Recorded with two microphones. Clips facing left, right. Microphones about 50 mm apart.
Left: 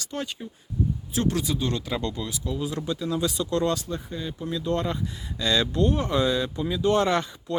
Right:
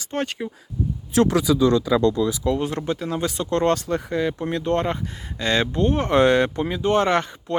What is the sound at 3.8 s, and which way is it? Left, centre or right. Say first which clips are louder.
Speech: right 9 dB; right.